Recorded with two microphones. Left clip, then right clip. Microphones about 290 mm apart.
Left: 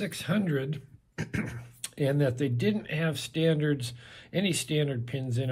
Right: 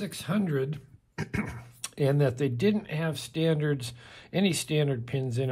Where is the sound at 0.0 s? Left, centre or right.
Centre.